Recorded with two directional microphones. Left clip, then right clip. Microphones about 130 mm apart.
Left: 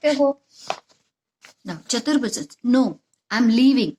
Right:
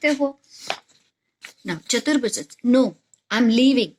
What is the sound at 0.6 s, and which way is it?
Chopping, 35° left (ahead or behind).